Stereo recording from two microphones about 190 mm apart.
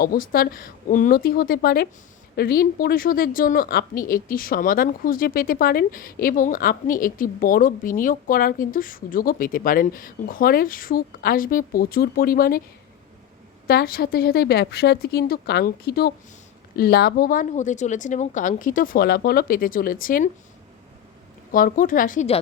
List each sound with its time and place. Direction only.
0.0 s a woman's voice: 50° left (ahead or behind)
13.7 s a woman's voice: 55° left (ahead or behind)
21.5 s a woman's voice: 45° left (ahead or behind)